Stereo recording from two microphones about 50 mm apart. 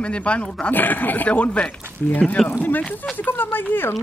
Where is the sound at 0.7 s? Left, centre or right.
Left.